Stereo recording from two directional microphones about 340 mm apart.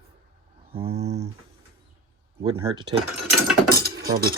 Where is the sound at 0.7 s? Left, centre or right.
Centre.